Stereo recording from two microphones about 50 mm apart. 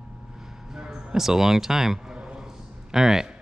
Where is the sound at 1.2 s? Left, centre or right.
Centre.